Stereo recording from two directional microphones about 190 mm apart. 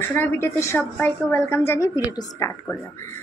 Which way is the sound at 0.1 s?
10° left (ahead or behind).